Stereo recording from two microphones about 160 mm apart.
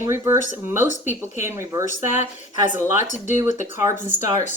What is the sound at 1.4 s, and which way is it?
Speech, 15° right (ahead or behind).